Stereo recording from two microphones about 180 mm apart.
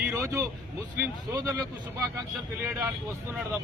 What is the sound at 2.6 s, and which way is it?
Speech, 10° right (ahead or behind).